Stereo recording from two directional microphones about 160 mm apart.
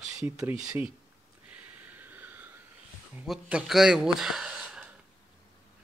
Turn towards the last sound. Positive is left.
turn(degrees=-5)  # may be behind; listen again after turning